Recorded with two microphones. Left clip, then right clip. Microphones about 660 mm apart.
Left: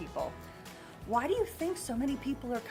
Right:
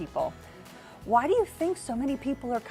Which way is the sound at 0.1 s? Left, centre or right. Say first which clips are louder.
Right 7 dB; right.